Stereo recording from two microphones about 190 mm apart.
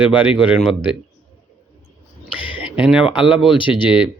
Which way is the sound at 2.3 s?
5° right (ahead or behind).